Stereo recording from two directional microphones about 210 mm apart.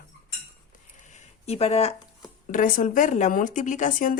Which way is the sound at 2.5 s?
40° left (ahead or behind).